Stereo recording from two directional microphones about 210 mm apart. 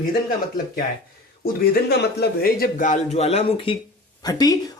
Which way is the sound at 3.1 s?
30° left (ahead or behind).